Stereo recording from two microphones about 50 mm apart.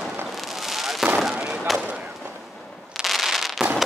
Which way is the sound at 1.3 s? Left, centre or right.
Right.